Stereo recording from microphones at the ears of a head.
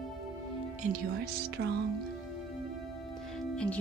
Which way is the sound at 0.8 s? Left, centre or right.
Right.